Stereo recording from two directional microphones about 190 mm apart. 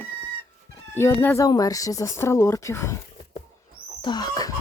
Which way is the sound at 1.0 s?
15° left (ahead or behind).